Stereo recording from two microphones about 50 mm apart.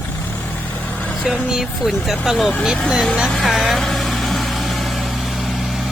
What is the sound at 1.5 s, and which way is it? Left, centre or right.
Speech, centre.